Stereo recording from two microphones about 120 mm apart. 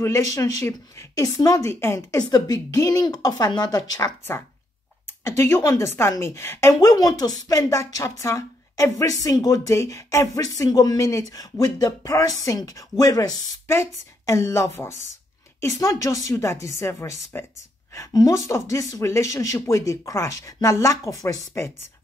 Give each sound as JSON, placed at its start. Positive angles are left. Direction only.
{"t": 0.3, "sound": "a woman's voice", "side_deg": 30}
{"t": 5.2, "sound": "a woman's voice", "side_deg": 20}
{"t": 6.7, "sound": "a woman's voice", "side_deg": 30}